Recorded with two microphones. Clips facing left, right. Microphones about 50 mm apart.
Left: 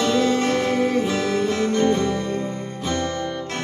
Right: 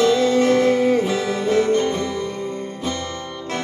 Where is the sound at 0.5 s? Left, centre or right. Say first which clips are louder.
Right 4 dB; right.